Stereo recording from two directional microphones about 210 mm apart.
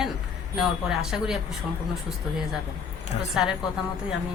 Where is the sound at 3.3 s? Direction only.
5° right (ahead or behind).